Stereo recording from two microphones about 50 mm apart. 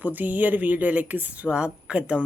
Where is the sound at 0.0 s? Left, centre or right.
Right.